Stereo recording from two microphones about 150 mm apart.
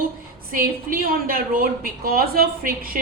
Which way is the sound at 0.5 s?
70° right (ahead or behind).